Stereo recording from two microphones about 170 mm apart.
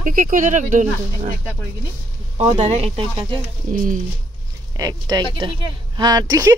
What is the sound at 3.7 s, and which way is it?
Speech, 50° right (ahead or behind).